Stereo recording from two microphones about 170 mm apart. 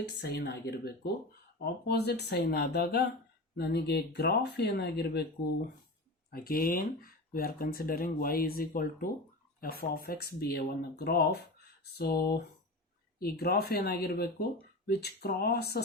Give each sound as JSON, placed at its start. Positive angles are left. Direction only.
{"t": 0.2, "sound": "speech", "side_deg": 75}
{"t": 6.3, "sound": "speech", "side_deg": 60}